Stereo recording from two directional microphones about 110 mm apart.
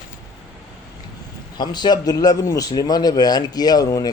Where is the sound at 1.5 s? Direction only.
40° left (ahead or behind).